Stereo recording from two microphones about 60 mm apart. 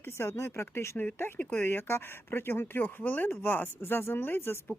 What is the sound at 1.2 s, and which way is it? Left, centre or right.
Speech, left.